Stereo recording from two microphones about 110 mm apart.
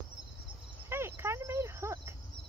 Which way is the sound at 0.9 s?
20° right (ahead or behind).